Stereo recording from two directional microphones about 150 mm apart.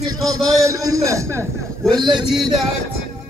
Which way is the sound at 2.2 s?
Centre (ahead or behind).